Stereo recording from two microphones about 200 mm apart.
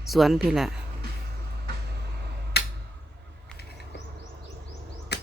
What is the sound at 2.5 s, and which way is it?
Tick, 55° left (ahead or behind).